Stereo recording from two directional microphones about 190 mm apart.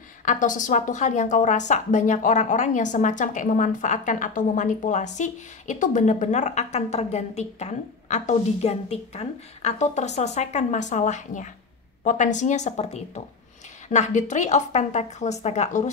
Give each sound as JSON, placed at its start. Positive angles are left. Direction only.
{"t": 0.2, "sound": "a woman's voice", "side_deg": 40}